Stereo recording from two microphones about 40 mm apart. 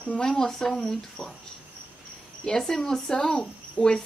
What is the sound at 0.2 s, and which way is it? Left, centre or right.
Speech, centre.